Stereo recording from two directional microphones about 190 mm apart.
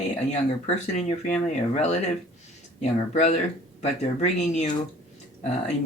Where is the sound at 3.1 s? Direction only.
35° left (ahead or behind).